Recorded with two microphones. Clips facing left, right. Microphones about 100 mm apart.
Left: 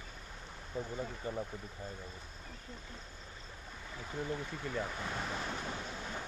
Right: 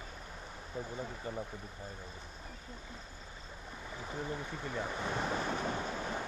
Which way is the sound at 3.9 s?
10° right (ahead or behind).